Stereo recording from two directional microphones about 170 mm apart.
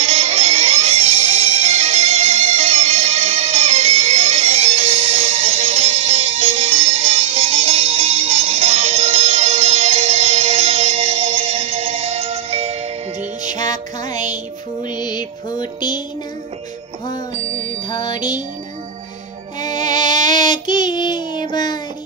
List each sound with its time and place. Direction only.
0.0 s music: 35° right (ahead or behind)
14.9 s music: 25° left (ahead or behind)
17.1 s music: 45° right (ahead or behind)
17.8 s music: 25° left (ahead or behind)
20.1 s child singing: 25° left (ahead or behind)